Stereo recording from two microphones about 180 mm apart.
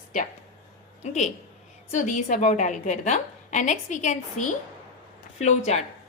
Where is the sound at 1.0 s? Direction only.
40° left (ahead or behind).